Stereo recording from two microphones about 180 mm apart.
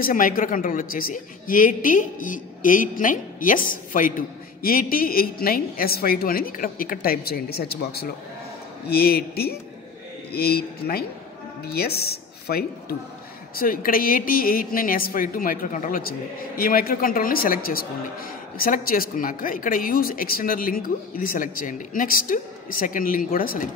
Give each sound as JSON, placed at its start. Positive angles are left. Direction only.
{"t": 0.0, "sound": "a woman's voice", "side_deg": 50}